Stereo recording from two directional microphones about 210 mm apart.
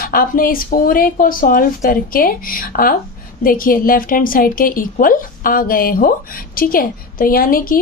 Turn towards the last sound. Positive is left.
turn(degrees=45)  # may be behind; listen again after turning